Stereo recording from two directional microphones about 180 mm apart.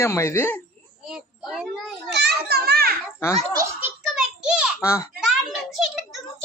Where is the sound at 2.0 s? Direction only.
70° right (ahead or behind).